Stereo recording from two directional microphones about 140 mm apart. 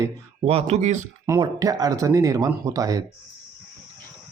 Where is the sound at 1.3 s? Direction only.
25° right (ahead or behind).